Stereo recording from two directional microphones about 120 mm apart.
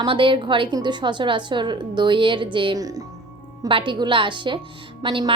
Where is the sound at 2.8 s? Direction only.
30° right (ahead or behind).